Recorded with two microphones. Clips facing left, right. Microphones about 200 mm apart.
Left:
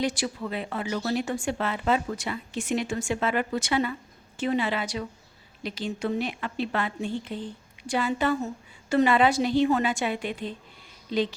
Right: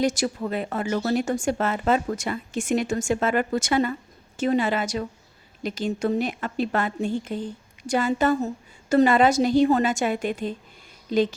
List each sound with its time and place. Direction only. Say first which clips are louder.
0.0 s a woman's voice: right 5 dB; 45° right (ahead or behind)